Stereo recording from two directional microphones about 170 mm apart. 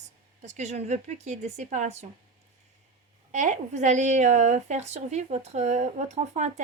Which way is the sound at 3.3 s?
45° right (ahead or behind).